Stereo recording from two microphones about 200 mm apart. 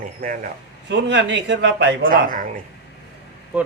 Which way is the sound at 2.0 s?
45° right (ahead or behind).